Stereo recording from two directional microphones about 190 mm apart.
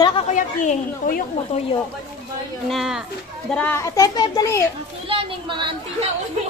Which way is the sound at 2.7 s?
Centre (ahead or behind).